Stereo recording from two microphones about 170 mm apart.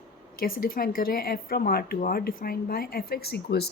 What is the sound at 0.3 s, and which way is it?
A woman's voice, 60° left (ahead or behind).